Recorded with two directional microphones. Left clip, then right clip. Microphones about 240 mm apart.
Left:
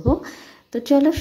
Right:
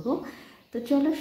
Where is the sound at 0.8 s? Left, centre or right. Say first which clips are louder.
Left 8 dB; left.